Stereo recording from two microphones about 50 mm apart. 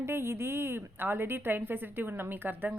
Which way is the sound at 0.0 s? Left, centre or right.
Right.